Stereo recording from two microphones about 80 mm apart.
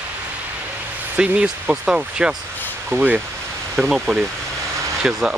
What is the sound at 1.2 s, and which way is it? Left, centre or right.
Speech, centre.